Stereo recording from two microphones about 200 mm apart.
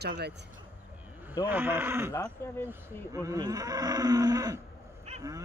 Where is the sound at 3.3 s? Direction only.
20° right (ahead or behind).